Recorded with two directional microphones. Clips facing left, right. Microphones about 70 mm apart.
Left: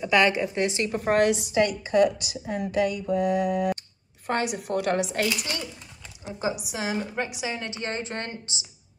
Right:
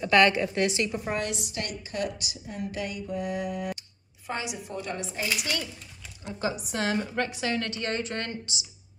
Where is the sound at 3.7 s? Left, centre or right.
Left.